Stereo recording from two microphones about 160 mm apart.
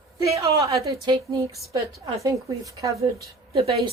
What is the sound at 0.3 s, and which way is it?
Speech, 20° right (ahead or behind).